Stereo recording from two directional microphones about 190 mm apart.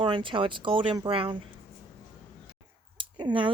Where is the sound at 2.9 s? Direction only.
25° right (ahead or behind).